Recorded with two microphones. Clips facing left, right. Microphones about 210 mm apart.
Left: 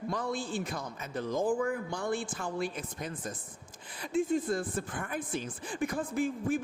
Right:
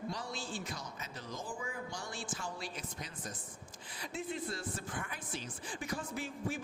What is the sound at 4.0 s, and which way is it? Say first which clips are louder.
Speech: left 11 dB; 50° left (ahead or behind).